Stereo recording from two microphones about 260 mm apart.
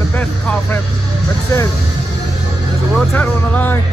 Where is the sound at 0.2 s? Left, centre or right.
Centre.